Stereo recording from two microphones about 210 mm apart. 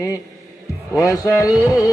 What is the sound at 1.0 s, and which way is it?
Speech, 15° left (ahead or behind).